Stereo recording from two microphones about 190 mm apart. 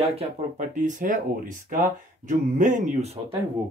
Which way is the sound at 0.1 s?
35° right (ahead or behind).